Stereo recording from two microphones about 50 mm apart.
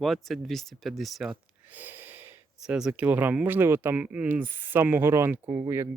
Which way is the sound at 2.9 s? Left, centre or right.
Right.